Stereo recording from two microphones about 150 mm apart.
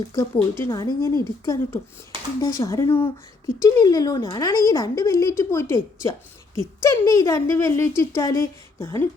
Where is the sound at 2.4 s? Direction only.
20° left (ahead or behind).